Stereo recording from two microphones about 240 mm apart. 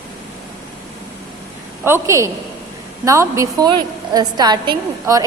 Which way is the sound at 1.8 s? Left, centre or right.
Centre.